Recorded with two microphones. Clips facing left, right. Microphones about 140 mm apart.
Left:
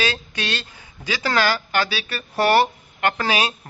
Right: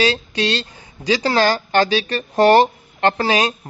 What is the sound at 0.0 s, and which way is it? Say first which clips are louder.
A man's voice: right 7 dB; 35° right (ahead or behind).